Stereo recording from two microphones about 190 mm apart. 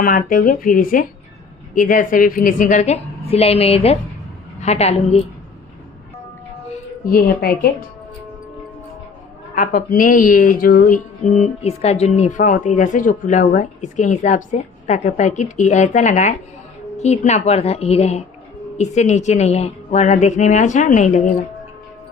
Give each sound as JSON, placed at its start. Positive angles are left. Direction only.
{"t": 0.0, "sound": "a woman's voice", "side_deg": 45}
{"t": 7.0, "sound": "a woman's voice", "side_deg": 50}
{"t": 9.6, "sound": "speech", "side_deg": 45}